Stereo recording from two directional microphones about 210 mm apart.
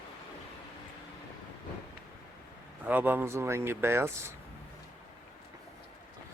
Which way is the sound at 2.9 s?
10° right (ahead or behind).